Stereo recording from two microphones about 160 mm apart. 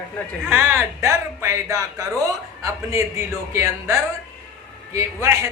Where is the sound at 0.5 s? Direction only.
15° right (ahead or behind).